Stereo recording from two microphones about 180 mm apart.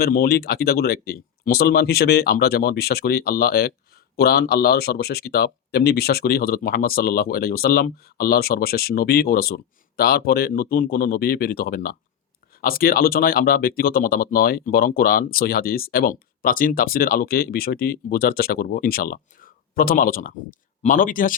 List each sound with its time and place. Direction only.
0.0 s speech: 55° left (ahead or behind)